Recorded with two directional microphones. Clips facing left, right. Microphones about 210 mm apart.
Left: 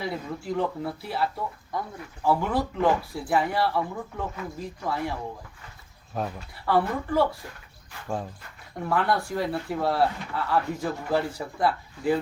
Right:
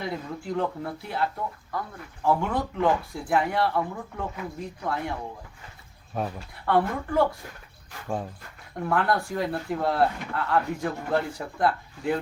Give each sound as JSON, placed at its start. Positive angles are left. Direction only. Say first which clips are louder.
{"t": 0.0, "sound": "speech", "louder": "left 1 dB", "side_deg": 0}